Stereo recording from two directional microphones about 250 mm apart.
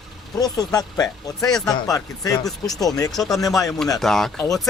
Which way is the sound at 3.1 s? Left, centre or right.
Centre.